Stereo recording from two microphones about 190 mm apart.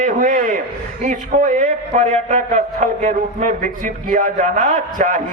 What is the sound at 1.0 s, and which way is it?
A man's voice, 40° right (ahead or behind).